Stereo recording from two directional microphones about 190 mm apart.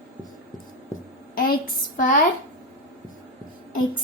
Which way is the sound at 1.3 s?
50° left (ahead or behind).